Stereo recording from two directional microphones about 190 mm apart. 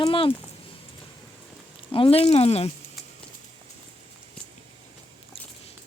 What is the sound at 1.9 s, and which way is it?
Speech, 30° left (ahead or behind).